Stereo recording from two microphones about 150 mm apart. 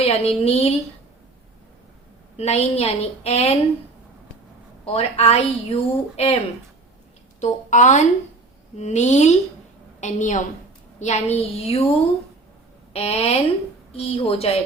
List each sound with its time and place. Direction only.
0.0 s a woman's voice: 40° left (ahead or behind)
2.3 s a woman's voice: 45° left (ahead or behind)
4.9 s a woman's voice: 40° left (ahead or behind)
7.4 s a woman's voice: 55° left (ahead or behind)
12.9 s a woman's voice: 40° left (ahead or behind)